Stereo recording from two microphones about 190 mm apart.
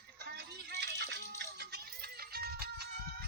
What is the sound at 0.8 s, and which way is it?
Music, 65° right (ahead or behind).